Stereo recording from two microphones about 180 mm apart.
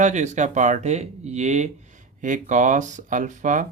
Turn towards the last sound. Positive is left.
turn(degrees=-45)  # may be behind; listen again after turning